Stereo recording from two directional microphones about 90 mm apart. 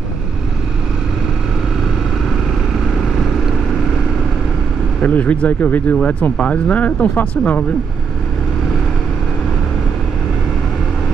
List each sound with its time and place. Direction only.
5.0 s speech: 15° left (ahead or behind)